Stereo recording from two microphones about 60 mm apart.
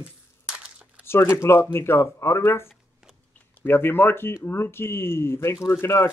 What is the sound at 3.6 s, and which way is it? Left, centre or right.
Speech, left.